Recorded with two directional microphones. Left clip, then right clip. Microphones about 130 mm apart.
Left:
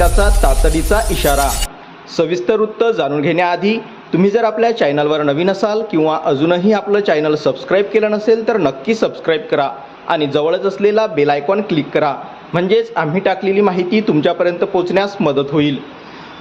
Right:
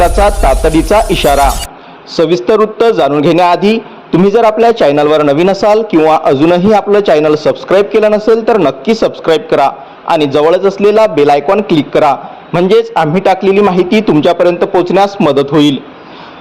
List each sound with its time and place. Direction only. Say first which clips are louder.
0.0 s a man's voice: right 6 dB; 55° right (ahead or behind)